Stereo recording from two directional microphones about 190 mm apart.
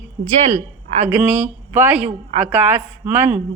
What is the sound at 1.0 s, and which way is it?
A woman's voice, 10° right (ahead or behind).